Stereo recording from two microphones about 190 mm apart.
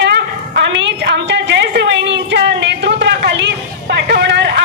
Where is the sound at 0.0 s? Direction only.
65° right (ahead or behind).